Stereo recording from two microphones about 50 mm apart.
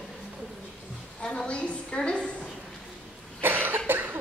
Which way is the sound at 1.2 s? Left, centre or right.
Left.